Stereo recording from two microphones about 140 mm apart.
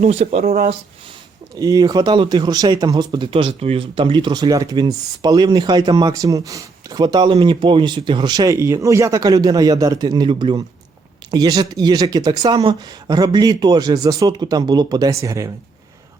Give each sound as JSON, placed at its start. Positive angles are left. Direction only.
{"t": 0.0, "sound": "speech", "side_deg": -45}
{"t": 1.5, "sound": "speech", "side_deg": -25}